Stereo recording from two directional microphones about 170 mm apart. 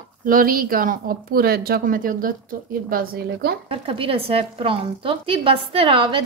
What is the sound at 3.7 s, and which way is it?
Speech, 30° right (ahead or behind).